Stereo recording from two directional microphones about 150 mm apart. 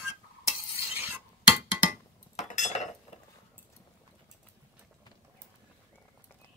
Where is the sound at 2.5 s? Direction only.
55° left (ahead or behind).